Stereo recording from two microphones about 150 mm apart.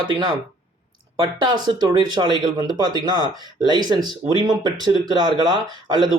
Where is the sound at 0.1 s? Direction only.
30° right (ahead or behind).